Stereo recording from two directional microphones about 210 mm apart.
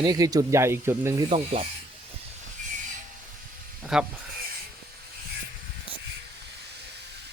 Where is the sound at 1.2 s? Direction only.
25° right (ahead or behind).